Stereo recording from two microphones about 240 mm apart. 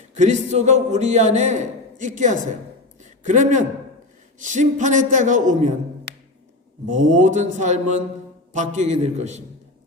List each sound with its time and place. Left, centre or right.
0.2 s a man's voice: right
6.1 s music: right
6.8 s a man's voice: right